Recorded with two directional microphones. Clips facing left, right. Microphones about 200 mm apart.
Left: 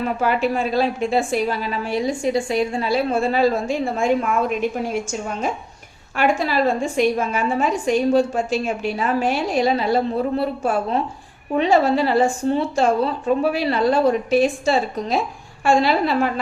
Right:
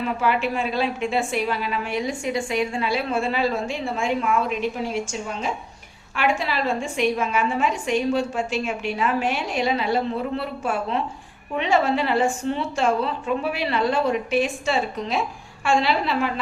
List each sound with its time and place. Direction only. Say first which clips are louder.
0.0 s a woman's voice: left 3 dB; 40° left (ahead or behind)